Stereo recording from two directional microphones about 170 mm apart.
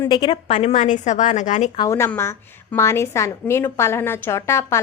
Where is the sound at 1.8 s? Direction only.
15° left (ahead or behind).